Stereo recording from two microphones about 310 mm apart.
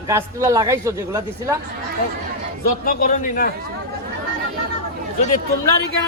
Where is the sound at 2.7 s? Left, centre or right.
Left.